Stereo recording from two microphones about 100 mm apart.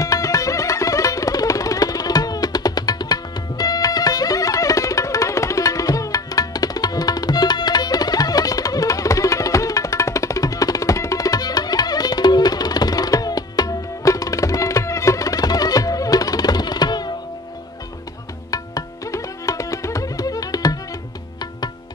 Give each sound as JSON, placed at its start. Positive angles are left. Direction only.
{"t": 0.0, "sound": "music", "side_deg": 35}
{"t": 18.5, "sound": "music", "side_deg": 35}